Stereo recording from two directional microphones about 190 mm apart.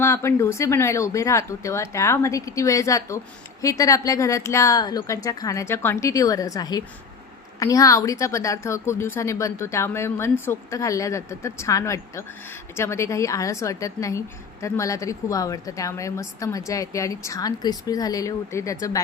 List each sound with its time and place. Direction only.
0.0 s a woman's voice: 15° left (ahead or behind)